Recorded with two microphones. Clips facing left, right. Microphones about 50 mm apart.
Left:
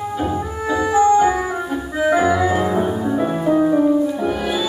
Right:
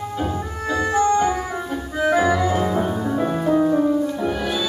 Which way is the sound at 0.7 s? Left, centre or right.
Centre.